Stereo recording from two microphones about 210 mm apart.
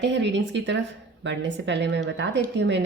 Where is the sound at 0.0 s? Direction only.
60° right (ahead or behind).